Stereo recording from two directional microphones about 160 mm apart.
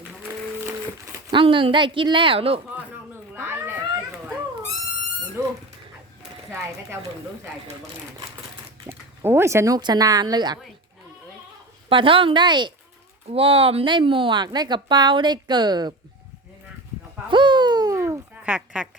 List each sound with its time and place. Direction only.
1.3 s speech: 30° right (ahead or behind)
3.3 s a sound: 15° right (ahead or behind)
8.9 s speech: 15° right (ahead or behind)
11.9 s a woman's voice: 35° right (ahead or behind)
17.2 s babbling: 30° right (ahead or behind)
18.5 s speech: 5° right (ahead or behind)